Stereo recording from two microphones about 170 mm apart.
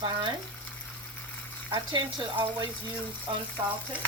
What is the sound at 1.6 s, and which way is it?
Speech, 30° right (ahead or behind).